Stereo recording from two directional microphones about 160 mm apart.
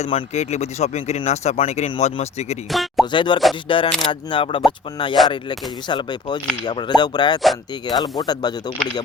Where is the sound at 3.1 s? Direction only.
30° left (ahead or behind).